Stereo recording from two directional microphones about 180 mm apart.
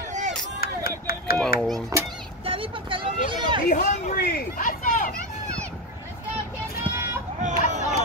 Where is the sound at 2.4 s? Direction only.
30° right (ahead or behind).